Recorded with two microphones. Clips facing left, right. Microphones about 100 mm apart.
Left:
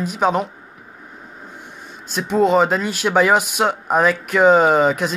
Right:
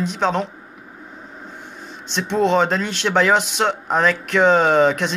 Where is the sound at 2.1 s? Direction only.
5° left (ahead or behind).